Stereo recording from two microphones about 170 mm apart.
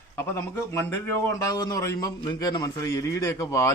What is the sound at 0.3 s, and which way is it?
A man's voice, 15° left (ahead or behind).